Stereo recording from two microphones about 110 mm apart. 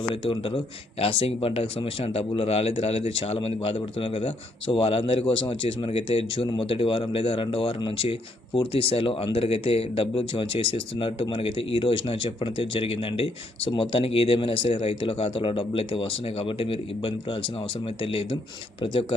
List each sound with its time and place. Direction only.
0.1 s speech: 55° left (ahead or behind)
7.8 s speech: 45° left (ahead or behind)
8.0 s speech: 55° left (ahead or behind)